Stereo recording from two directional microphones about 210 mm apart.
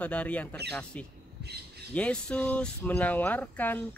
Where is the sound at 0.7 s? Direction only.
5° left (ahead or behind).